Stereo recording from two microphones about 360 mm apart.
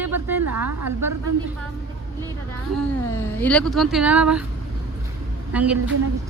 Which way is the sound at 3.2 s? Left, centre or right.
Centre.